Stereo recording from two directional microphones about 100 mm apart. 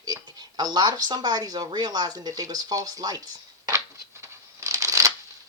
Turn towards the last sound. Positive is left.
turn(degrees=-35)  # may be behind; listen again after turning